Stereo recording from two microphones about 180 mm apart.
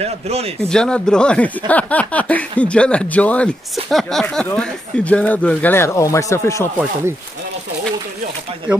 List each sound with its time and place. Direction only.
0.0 s a man's voice: 35° right (ahead or behind)
0.7 s speech: 5° left (ahead or behind)
8.7 s speech: 5° right (ahead or behind)